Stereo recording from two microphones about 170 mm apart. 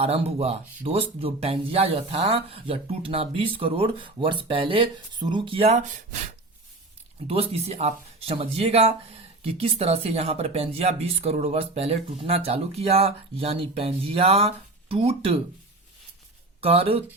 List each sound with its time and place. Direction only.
0.0 s speech: 35° right (ahead or behind)
7.3 s speech: 35° right (ahead or behind)
16.6 s speech: 35° right (ahead or behind)